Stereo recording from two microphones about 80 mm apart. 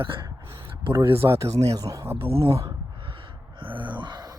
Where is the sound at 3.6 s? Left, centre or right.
Right.